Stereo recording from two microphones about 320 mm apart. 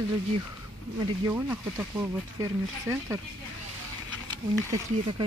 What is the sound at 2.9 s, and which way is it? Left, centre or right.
Speech, centre.